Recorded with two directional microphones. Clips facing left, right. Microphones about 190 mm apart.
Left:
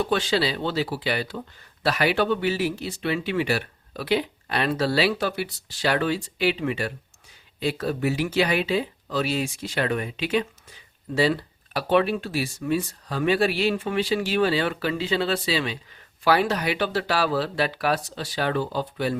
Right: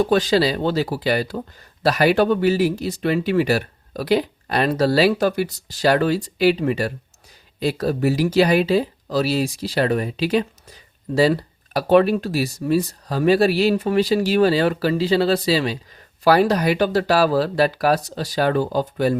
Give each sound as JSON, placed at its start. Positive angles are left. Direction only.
{"t": 0.0, "sound": "speech", "side_deg": -40}